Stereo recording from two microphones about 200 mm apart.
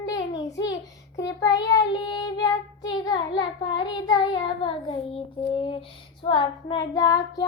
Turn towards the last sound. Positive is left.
turn(degrees=20)  # may be behind; listen again after turning